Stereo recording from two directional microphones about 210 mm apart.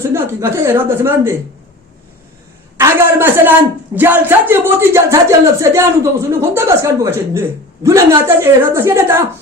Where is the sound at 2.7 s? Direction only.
10° right (ahead or behind).